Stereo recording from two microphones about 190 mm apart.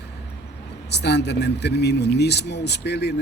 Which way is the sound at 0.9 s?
60° left (ahead or behind).